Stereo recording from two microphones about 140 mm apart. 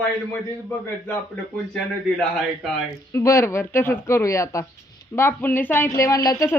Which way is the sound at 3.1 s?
20° left (ahead or behind).